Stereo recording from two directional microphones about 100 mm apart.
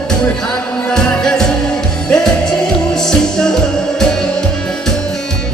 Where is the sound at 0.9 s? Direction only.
5° left (ahead or behind).